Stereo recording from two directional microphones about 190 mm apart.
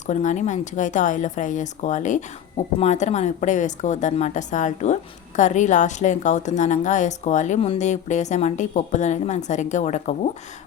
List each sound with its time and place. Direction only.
0.1 s a woman's voice: 40° left (ahead or behind)